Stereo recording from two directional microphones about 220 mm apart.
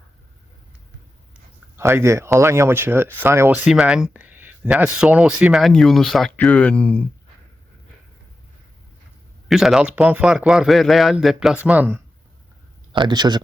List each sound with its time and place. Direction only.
1.7 s speech: 10° right (ahead or behind); by 7.0 s 5° left (ahead or behind)
9.5 s speech: centre (ahead or behind)
12.9 s a man's voice: 20° right (ahead or behind)